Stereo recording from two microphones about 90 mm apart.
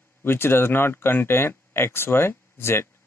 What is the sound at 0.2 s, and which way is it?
Speech, 25° left (ahead or behind).